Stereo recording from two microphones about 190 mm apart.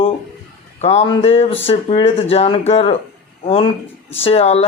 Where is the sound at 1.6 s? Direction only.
30° left (ahead or behind).